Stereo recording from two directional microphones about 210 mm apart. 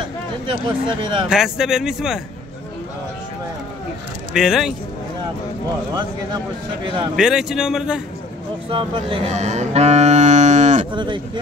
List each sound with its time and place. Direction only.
0.5 s speech: 20° right (ahead or behind)
1.3 s speech: centre (ahead or behind)
4.4 s speech: centre (ahead or behind)
7.2 s speech: 5° right (ahead or behind)
8.6 s speech: 25° right (ahead or behind)
10.9 s cattle: 20° right (ahead or behind)